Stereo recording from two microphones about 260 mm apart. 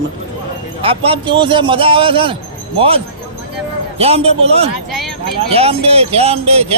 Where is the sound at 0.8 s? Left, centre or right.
Right.